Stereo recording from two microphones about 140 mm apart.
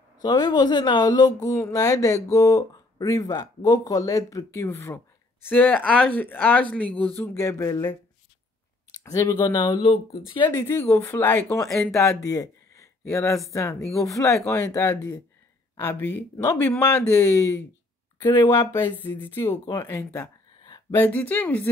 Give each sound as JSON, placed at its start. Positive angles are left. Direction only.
{"t": 0.2, "sound": "speech", "side_deg": 30}
{"t": 7.3, "sound": "speech", "side_deg": 25}
{"t": 8.9, "sound": "speech", "side_deg": 25}
{"t": 9.8, "sound": "speech", "side_deg": 35}
{"t": 10.5, "sound": "speech", "side_deg": 20}
{"t": 11.9, "sound": "speech", "side_deg": 20}
{"t": 13.7, "sound": "speech", "side_deg": 0}
{"t": 14.1, "sound": "speech", "side_deg": 20}
{"t": 19.9, "sound": "speech", "side_deg": 15}